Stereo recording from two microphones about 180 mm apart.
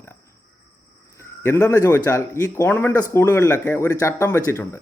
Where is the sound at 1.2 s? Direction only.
15° left (ahead or behind).